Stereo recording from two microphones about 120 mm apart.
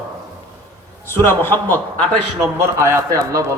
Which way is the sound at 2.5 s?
20° right (ahead or behind).